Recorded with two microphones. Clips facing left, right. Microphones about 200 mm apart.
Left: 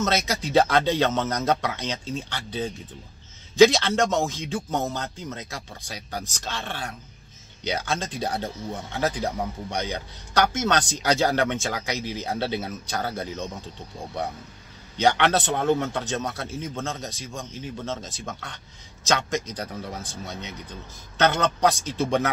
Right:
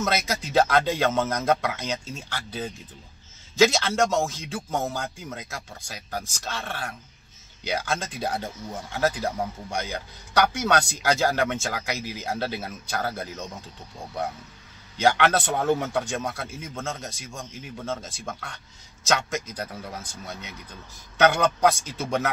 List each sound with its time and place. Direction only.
0.0 s speech: 5° right (ahead or behind)
15.0 s a man's voice: 5° right (ahead or behind)
20.0 s speech: 25° left (ahead or behind)
21.2 s speech: 10° right (ahead or behind)